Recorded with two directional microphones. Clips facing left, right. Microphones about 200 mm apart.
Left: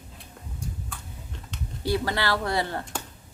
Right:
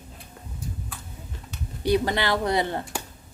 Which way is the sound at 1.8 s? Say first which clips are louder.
Right 4 dB; 20° right (ahead or behind).